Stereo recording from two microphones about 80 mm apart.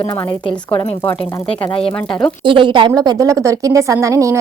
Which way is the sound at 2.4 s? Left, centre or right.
Right.